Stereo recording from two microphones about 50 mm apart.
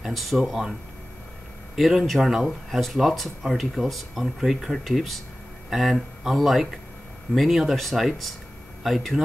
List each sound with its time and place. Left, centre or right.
0.0 s speech: centre
1.8 s speech: centre